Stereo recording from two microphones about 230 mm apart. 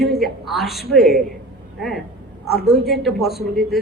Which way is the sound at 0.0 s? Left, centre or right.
Centre.